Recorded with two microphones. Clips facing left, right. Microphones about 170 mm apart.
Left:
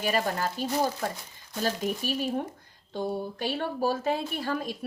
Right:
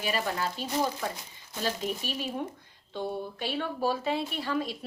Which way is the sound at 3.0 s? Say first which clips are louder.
Left 3 dB; 45° left (ahead or behind).